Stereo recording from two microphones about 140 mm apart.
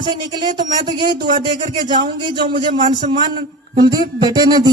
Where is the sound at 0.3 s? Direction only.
30° right (ahead or behind).